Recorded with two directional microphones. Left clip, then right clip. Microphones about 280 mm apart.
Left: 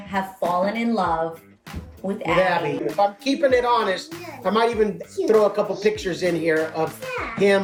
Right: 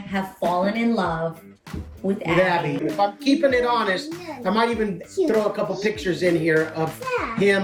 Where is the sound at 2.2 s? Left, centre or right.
Centre.